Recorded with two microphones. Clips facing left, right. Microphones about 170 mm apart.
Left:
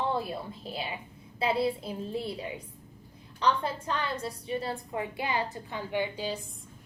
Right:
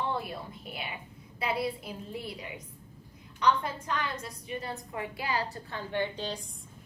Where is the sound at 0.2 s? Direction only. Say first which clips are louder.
Left 4 dB; 25° left (ahead or behind); by 6.4 s 10° left (ahead or behind).